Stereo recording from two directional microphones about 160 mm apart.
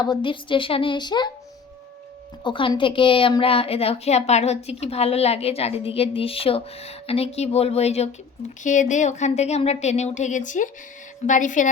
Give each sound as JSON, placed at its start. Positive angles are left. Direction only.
{"t": 0.0, "sound": "a woman's voice", "side_deg": 30}
{"t": 2.4, "sound": "a woman's voice", "side_deg": 30}